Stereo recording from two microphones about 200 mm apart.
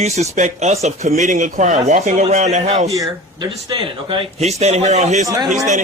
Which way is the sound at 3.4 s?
25° right (ahead or behind).